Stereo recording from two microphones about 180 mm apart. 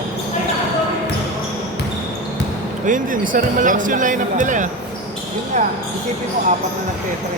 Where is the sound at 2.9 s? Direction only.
45° right (ahead or behind).